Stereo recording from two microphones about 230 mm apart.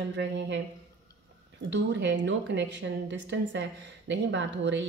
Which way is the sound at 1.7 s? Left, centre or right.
Right.